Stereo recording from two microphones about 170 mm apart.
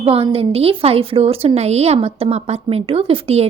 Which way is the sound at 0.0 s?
35° right (ahead or behind).